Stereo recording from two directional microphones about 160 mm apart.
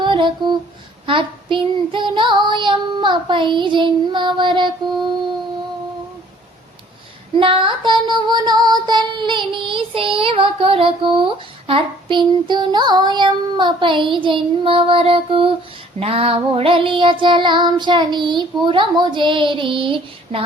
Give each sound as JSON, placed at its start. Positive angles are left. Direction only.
{"t": 0.0, "sound": "a sound", "side_deg": -30}
{"t": 1.0, "sound": "child singing", "side_deg": -30}
{"t": 7.3, "sound": "child singing", "side_deg": -35}
{"t": 10.2, "sound": "speech", "side_deg": -35}